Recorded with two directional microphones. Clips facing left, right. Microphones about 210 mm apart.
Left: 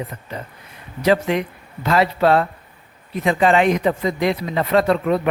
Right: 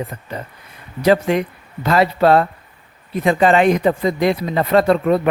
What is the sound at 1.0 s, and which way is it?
Speech, 40° right (ahead or behind).